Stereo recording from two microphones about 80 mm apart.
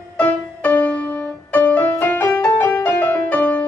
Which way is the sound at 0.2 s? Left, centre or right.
Left.